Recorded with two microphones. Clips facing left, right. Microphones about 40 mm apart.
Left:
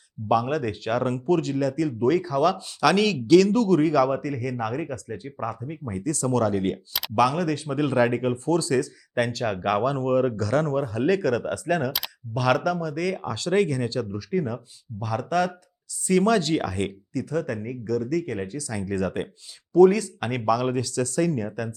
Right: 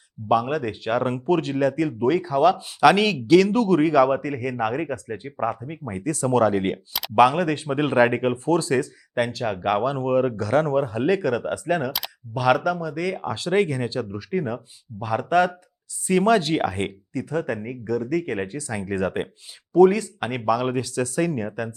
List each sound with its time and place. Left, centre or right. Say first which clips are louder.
0.3 s speech: right 1 dB; centre
9.1 s speech: right 1 dB; centre